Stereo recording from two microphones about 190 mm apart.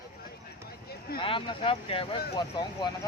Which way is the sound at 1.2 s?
25° left (ahead or behind).